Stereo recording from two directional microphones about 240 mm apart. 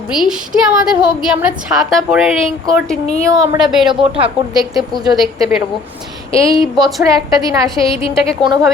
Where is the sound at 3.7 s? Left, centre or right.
Centre.